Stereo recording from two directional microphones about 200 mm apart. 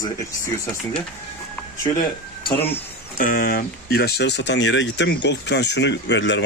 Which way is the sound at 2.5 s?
10° left (ahead or behind).